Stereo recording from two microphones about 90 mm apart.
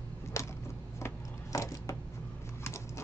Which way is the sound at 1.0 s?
35° left (ahead or behind).